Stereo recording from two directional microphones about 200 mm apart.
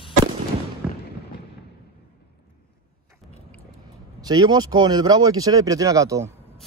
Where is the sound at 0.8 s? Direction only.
5° right (ahead or behind).